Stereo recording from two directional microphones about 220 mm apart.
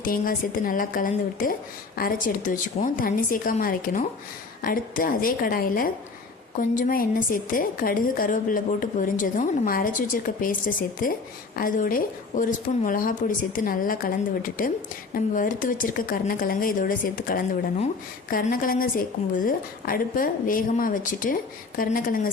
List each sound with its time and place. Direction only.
0.0 s a woman's voice: 40° left (ahead or behind)